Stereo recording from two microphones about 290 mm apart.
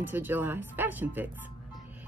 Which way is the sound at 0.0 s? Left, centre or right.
Centre.